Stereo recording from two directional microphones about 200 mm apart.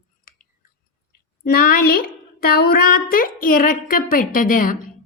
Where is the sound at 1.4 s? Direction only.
50° left (ahead or behind).